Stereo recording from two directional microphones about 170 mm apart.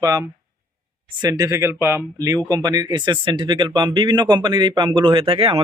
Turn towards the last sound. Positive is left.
turn(degrees=-35)  # may be behind; listen again after turning